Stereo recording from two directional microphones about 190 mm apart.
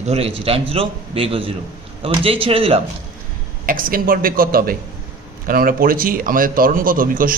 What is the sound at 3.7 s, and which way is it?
A man's voice, 45° right (ahead or behind).